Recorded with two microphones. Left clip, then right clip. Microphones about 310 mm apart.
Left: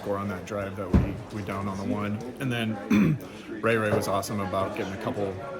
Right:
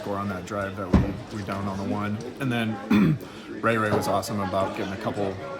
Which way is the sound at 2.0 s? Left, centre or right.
Centre.